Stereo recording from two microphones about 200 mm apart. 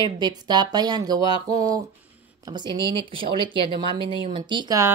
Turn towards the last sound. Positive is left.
turn(degrees=-20)  # may be behind; listen again after turning